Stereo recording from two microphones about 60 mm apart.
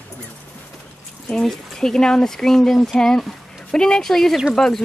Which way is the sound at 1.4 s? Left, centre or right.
Centre.